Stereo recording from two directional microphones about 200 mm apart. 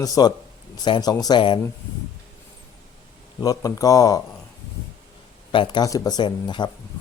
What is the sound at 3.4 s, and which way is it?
Speech, 15° left (ahead or behind).